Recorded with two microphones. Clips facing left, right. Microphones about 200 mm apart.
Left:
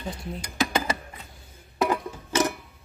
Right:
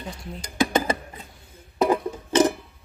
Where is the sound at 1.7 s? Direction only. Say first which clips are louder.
Right 4 dB; 30° right (ahead or behind).